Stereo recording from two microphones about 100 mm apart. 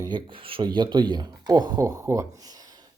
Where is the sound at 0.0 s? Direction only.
55° right (ahead or behind).